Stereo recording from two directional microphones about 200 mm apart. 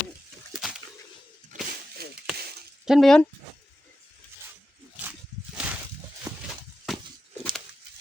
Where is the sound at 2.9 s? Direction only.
Centre (ahead or behind).